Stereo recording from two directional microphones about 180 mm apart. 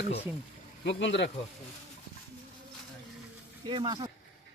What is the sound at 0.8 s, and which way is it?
Speech, 80° left.